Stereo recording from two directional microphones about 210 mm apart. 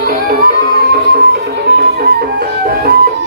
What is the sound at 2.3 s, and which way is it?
Music, 45° right (ahead or behind).